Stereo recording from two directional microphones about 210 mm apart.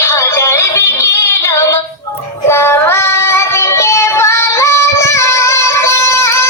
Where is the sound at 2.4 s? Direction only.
10° left (ahead or behind).